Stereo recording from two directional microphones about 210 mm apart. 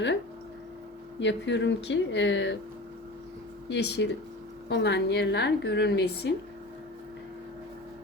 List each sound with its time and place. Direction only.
1.2 s speech: 60° left (ahead or behind)
3.7 s a woman's voice: 55° left (ahead or behind)